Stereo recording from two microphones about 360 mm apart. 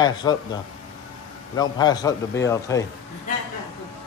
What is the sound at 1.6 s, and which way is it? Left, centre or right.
A man's voice, centre.